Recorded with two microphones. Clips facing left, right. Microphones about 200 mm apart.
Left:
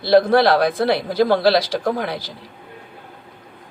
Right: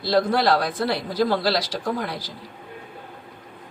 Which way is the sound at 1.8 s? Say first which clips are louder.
Left 5 dB; 55° left (ahead or behind).